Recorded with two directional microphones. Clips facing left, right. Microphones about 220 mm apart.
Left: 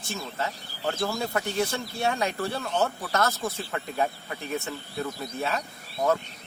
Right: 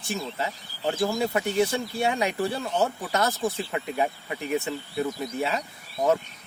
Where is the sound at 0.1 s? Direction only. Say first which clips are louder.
Right 2 dB; 15° right (ahead or behind).